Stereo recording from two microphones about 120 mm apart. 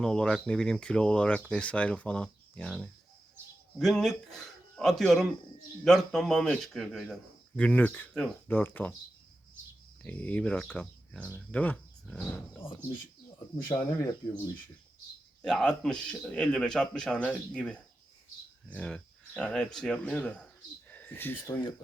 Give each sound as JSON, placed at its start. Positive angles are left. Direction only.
{"t": 0.0, "sound": "speech", "side_deg": 5}
{"t": 10.0, "sound": "speech", "side_deg": 10}
{"t": 13.7, "sound": "speech", "side_deg": 25}
{"t": 15.4, "sound": "speech", "side_deg": 5}